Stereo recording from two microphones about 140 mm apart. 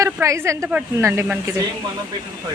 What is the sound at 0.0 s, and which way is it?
A woman's voice, 20° right (ahead or behind).